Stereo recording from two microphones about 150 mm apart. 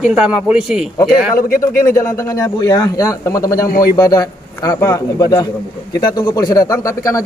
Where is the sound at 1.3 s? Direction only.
70° left (ahead or behind).